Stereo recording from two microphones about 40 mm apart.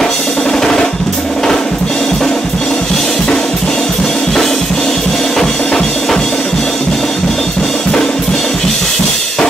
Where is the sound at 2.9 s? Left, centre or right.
Centre.